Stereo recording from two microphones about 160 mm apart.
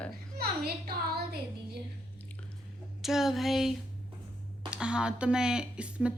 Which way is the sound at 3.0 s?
Centre (ahead or behind).